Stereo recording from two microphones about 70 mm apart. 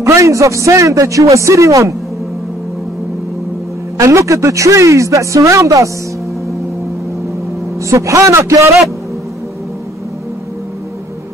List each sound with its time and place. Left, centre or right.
0.0 s a man's voice: right
4.0 s a man's voice: right
7.9 s a man's voice: right